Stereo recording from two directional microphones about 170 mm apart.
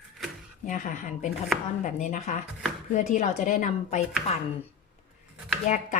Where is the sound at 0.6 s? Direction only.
50° left (ahead or behind).